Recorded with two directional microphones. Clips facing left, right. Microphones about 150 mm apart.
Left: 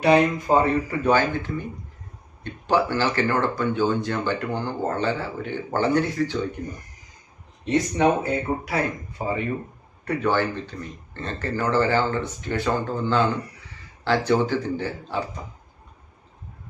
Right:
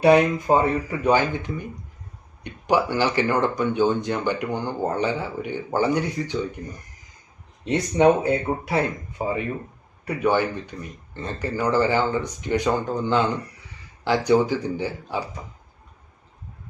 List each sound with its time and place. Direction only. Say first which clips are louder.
0.0 s speech: right 2 dB; 15° right (ahead or behind)
7.6 s speech: right 2 dB; 20° right (ahead or behind)